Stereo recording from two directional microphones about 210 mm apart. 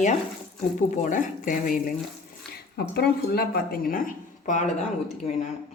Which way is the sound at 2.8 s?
50° left (ahead or behind).